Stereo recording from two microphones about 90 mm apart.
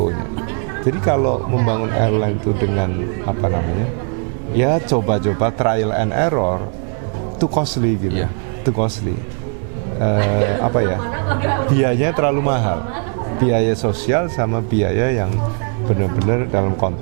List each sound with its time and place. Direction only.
0.9 s a man's voice: 20° right (ahead or behind)
10.0 s a man's voice: 20° right (ahead or behind)